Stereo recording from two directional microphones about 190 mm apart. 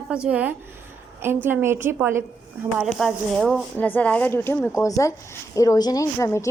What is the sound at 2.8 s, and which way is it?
Speech, centre (ahead or behind).